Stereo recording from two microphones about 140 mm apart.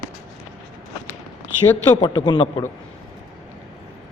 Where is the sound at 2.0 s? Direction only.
30° left (ahead or behind).